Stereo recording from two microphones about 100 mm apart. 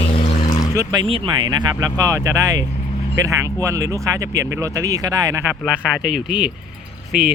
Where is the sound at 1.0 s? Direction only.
65° right (ahead or behind).